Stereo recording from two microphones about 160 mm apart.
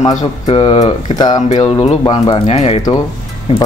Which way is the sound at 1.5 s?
40° left (ahead or behind).